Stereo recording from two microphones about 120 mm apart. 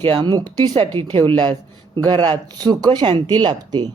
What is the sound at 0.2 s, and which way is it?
Speech, 35° right (ahead or behind).